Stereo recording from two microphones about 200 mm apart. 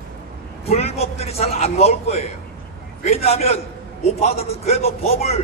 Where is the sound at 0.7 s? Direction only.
30° left (ahead or behind).